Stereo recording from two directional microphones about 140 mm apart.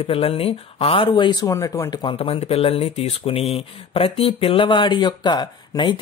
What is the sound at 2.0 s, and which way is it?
Speech, 40° left (ahead or behind).